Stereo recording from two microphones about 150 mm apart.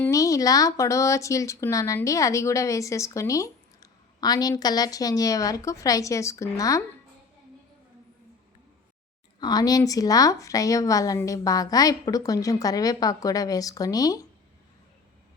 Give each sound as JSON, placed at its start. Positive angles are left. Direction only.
{"t": 0.0, "sound": "speech", "side_deg": 20}
{"t": 9.4, "sound": "speech", "side_deg": 25}